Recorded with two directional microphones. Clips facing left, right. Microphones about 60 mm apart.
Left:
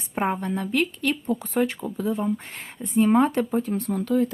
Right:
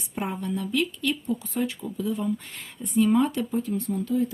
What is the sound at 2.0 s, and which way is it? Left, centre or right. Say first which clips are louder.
Speech: left 2 dB; left.